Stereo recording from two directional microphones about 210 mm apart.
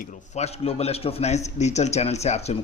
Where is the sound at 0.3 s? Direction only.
30° left (ahead or behind).